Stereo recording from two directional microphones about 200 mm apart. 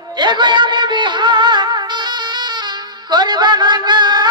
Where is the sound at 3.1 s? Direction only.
20° right (ahead or behind).